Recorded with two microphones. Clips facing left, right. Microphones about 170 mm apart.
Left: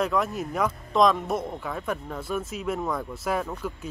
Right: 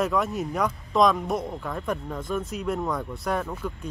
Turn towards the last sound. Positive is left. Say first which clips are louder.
# even
turn(degrees=5)  # may be behind; listen again after turning